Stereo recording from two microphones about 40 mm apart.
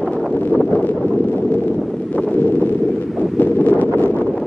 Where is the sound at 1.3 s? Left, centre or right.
Left.